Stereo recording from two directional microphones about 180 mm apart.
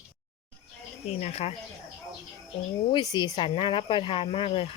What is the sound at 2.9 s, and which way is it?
Speech, 25° left (ahead or behind).